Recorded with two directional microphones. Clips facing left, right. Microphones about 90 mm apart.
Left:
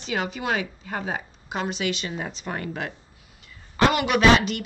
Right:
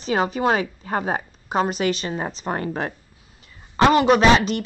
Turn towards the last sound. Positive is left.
turn(degrees=-30)  # may be behind; listen again after turning